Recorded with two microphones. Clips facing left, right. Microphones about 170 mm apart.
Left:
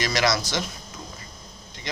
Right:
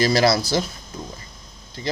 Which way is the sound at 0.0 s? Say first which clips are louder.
Right 6 dB; 35° right (ahead or behind).